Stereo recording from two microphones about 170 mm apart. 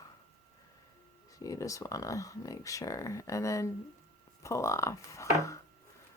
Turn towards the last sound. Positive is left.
turn(degrees=20)  # may be behind; listen again after turning